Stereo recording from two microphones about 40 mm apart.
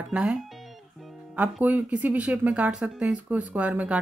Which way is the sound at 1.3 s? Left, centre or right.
Right.